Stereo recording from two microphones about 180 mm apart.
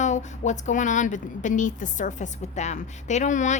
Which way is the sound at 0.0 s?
40° left (ahead or behind).